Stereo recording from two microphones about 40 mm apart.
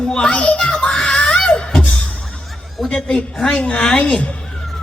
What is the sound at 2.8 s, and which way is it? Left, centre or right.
Speech, centre.